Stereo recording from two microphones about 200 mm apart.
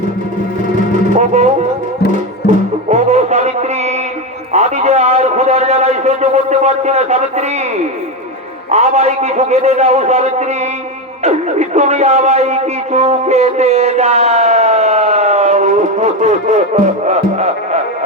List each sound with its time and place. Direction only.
1.1 s music: 35° right (ahead or behind)
2.4 s music: 55° left (ahead or behind)
2.9 s a sound: 35° right (ahead or behind)
4.5 s a man's voice: 35° right (ahead or behind)